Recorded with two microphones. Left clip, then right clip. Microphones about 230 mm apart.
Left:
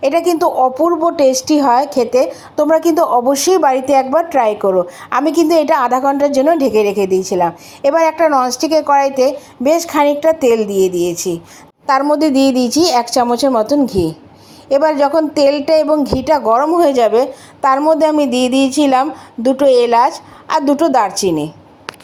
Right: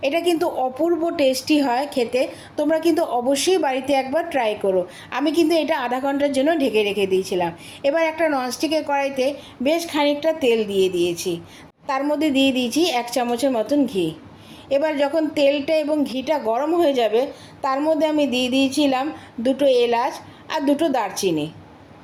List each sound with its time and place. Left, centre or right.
0.0 s a woman's voice: left